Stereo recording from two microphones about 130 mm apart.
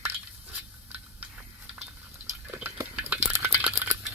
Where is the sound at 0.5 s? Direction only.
10° right (ahead or behind).